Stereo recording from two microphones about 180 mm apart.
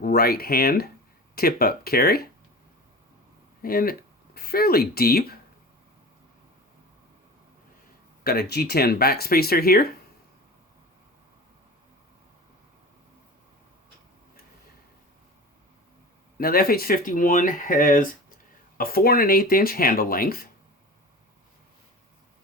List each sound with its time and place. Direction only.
0.0 s speech: 60° left (ahead or behind)
3.6 s speech: 55° left (ahead or behind)
8.2 s speech: 65° left (ahead or behind)
16.4 s speech: 55° left (ahead or behind)